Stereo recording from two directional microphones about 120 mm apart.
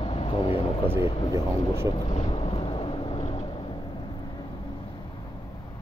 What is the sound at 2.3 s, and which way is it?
Vehicle, 50° left (ahead or behind).